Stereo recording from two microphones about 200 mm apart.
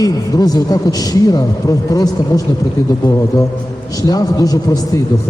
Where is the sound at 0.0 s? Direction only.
20° left (ahead or behind).